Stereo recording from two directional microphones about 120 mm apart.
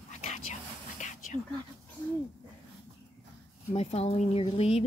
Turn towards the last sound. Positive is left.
turn(degrees=55)  # may be behind; listen again after turning